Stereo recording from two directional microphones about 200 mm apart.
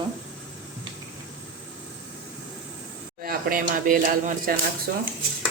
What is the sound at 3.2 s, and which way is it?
Speech, 45° right (ahead or behind).